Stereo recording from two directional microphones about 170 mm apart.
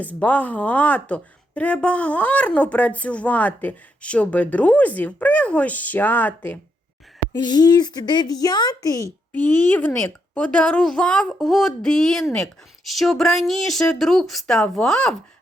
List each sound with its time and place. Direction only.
0.0 s speech: 10° left (ahead or behind)
7.4 s speech: 25° left (ahead or behind); by 15.1 s 5° left (ahead or behind)